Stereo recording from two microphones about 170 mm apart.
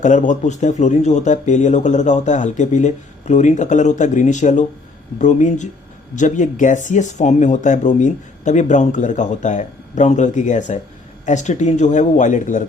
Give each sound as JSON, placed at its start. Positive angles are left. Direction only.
{"t": 0.0, "sound": "speech", "side_deg": 50}